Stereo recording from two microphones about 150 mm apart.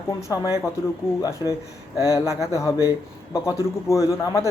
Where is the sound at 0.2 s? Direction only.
20° left (ahead or behind).